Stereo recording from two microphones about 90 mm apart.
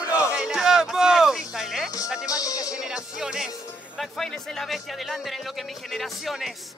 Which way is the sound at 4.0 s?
5° left (ahead or behind).